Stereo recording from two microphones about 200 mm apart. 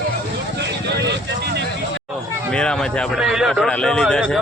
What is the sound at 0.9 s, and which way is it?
Vehicle, 60° right (ahead or behind).